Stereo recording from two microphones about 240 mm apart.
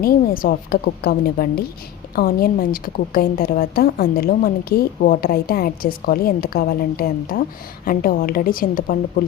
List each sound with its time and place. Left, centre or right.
0.0 s a woman's voice: left